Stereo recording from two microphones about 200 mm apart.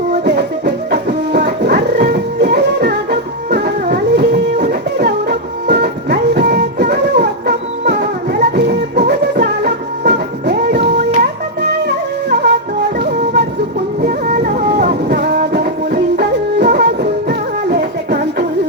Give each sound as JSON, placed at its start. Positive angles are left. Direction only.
{"t": 0.1, "sound": "music", "side_deg": -55}